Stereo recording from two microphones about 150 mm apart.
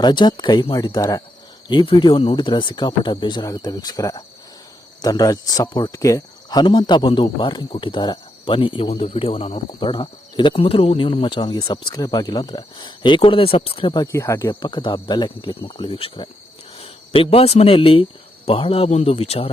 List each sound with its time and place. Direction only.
0.0 s speech: 30° left (ahead or behind)
14.6 s speech: 30° left (ahead or behind)